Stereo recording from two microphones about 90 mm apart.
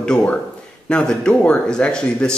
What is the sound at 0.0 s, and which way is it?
Speech, 10° left (ahead or behind).